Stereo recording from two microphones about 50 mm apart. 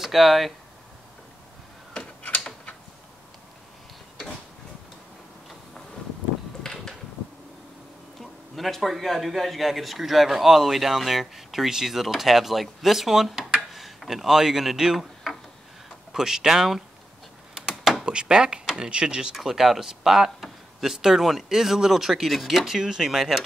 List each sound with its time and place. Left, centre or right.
0.0 s speech: centre
2.0 s a sound: centre
6.6 s a sound: centre
8.2 s speech: centre
17.6 s door: centre
18.0 s speech: centre
19.3 s speech: centre